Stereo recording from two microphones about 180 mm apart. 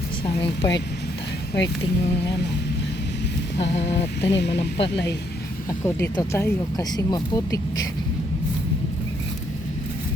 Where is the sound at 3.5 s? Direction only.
35° left (ahead or behind).